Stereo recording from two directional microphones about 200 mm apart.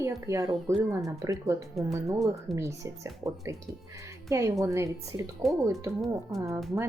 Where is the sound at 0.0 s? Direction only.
15° right (ahead or behind).